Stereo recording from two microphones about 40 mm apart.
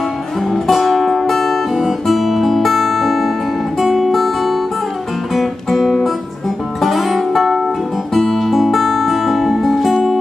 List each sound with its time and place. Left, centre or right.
0.7 s music: centre
3.8 s guitar: centre
6.8 s music: centre